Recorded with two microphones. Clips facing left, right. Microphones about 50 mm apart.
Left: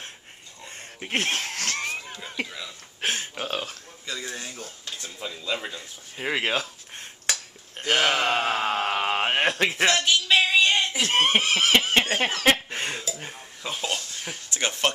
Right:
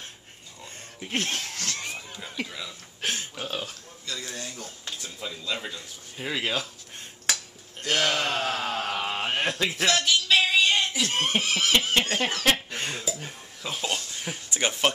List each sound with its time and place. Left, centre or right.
0.9 s a sound: left
2.4 s speech: centre
3.0 s speech: left
4.0 s speech: centre
6.1 s speech: left
7.8 s speech: left
9.7 s speech: left
9.9 s music: centre
11.0 s a sound: left
12.1 s a sound: left
13.6 s speech: centre
14.1 s a sound: centre
14.5 s speech: centre